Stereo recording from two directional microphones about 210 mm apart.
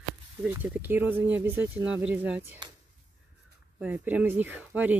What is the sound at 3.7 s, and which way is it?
Speech, 5° right (ahead or behind).